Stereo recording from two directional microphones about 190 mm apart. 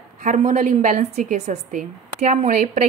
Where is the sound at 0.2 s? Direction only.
40° right (ahead or behind).